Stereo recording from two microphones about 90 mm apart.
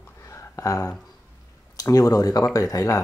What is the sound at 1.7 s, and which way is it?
Speech, 45° left (ahead or behind).